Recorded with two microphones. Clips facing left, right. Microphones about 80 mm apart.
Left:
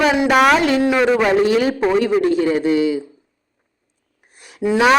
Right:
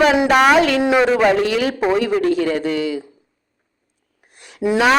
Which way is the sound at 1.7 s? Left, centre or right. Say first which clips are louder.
Left 1 dB; centre.